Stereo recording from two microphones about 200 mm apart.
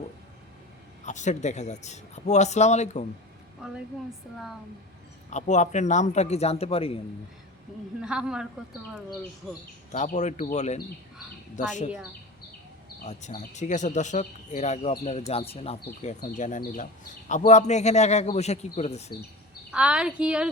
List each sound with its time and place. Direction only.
1.0 s speech: 35° left (ahead or behind)
5.3 s speech: 35° left (ahead or behind)
8.0 s speech: 5° right (ahead or behind)
9.9 s speech: 35° left (ahead or behind)
13.1 s speech: 35° left (ahead or behind)
19.7 s speech: 5° right (ahead or behind)